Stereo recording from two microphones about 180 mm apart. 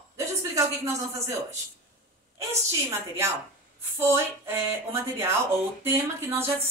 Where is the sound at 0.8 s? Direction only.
15° right (ahead or behind).